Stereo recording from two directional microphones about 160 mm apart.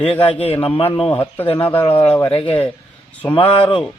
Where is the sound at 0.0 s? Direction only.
35° left (ahead or behind).